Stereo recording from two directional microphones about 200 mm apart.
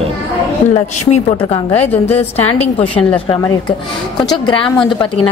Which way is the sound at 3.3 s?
25° left (ahead or behind).